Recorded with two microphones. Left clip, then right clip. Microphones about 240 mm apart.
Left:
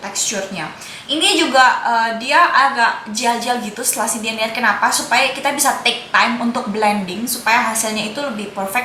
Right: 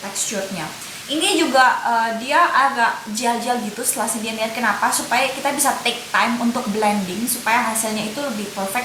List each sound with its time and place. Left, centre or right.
1.3 s a woman's voice: centre
6.3 s a woman's voice: right
7.5 s a woman's voice: centre